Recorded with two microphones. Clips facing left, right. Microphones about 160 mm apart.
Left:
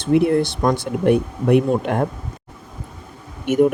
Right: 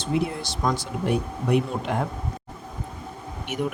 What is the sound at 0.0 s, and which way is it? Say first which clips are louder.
Speech: left 10 dB; 60° left (ahead or behind).